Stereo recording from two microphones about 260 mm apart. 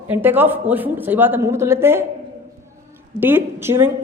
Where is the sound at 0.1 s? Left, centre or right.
Centre.